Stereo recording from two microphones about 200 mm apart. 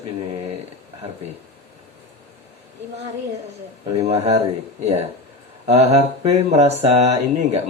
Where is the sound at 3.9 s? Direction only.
30° right (ahead or behind).